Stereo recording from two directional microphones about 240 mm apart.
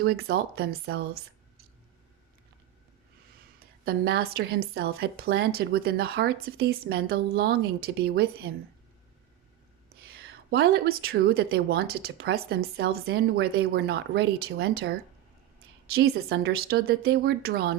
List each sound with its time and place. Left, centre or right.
0.0 s a woman's voice: right
3.8 s a woman's voice: right
9.9 s a woman's voice: right